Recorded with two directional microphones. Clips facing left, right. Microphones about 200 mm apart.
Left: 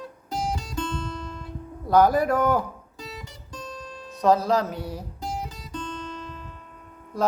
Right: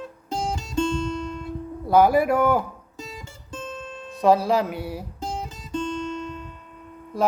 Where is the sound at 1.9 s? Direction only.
10° right (ahead or behind).